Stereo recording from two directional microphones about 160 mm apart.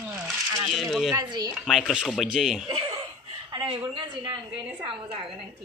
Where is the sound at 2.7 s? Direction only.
35° right (ahead or behind).